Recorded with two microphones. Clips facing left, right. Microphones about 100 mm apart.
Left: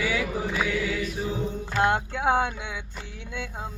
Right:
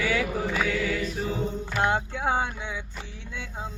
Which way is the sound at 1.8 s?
65° left (ahead or behind).